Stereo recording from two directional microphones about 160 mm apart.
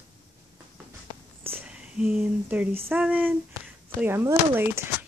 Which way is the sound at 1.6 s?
5° right (ahead or behind).